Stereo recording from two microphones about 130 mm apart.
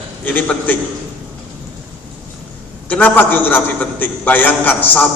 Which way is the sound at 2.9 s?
10° left (ahead or behind).